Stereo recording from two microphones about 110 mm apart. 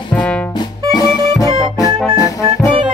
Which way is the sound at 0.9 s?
35° left (ahead or behind).